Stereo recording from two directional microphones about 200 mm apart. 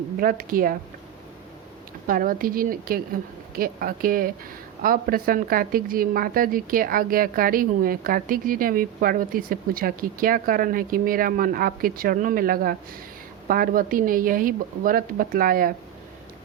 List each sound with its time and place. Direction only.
0.2 s a woman's voice: 45° right (ahead or behind)
2.0 s a woman's voice: 45° right (ahead or behind)